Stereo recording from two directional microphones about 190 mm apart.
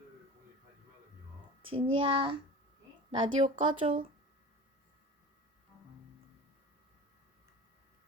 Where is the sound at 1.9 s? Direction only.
25° right (ahead or behind).